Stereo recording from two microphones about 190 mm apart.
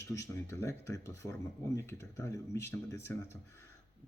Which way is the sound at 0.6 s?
15° left (ahead or behind).